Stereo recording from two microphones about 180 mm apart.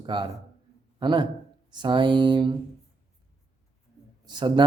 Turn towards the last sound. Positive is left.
turn(degrees=-25)  # may be behind; listen again after turning